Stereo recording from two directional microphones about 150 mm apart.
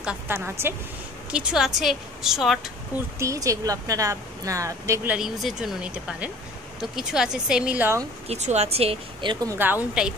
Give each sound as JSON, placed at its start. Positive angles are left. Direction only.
{"t": 0.0, "sound": "speech", "side_deg": -10}
{"t": 1.3, "sound": "a woman's voice", "side_deg": -5}
{"t": 3.2, "sound": "a woman's voice", "side_deg": -20}
{"t": 5.1, "sound": "a woman's voice", "side_deg": -5}
{"t": 8.3, "sound": "speech", "side_deg": -45}
{"t": 9.6, "sound": "speech", "side_deg": -10}